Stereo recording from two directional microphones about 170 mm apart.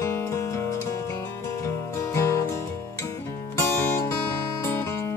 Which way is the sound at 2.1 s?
15° left (ahead or behind).